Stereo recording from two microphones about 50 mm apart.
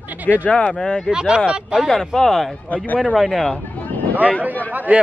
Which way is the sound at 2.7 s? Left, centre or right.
Left.